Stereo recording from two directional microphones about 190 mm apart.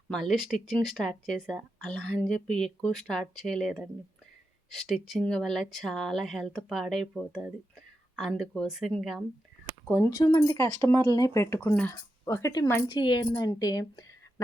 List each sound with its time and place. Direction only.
0.1 s speech: centre (ahead or behind)
9.8 s speech: 10° left (ahead or behind)